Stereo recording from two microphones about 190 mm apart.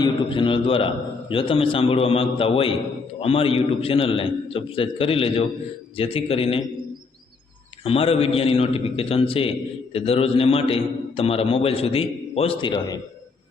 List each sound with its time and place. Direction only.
0.0 s a man's voice: 25° left (ahead or behind)
7.9 s a man's voice: 30° left (ahead or behind)